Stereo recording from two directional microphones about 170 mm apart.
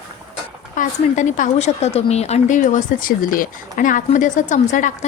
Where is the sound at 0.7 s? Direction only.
45° left (ahead or behind).